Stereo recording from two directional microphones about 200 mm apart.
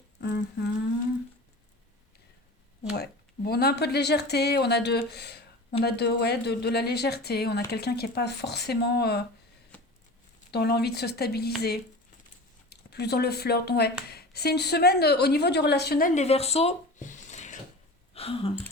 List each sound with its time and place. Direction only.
0.2 s humming: 55° left (ahead or behind)
2.9 s speech: 50° left (ahead or behind)
10.5 s speech: 55° left (ahead or behind)
12.7 s a woman's voice: 55° left (ahead or behind); by 17.6 s 35° left (ahead or behind)
18.1 s a sound: 30° left (ahead or behind)